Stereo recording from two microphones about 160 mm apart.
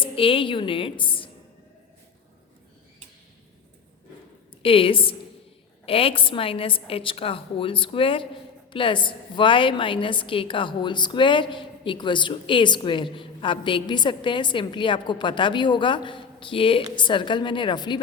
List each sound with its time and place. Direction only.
0.0 s a woman's voice: 35° left (ahead or behind)
4.6 s a woman's voice: 35° left (ahead or behind)